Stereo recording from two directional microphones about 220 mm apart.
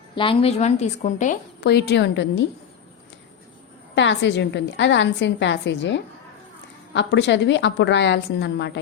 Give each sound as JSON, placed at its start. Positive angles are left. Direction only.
{"t": 0.2, "sound": "a woman's voice", "side_deg": 25}
{"t": 1.6, "sound": "a woman's voice", "side_deg": 50}
{"t": 3.9, "sound": "a woman's voice", "side_deg": 55}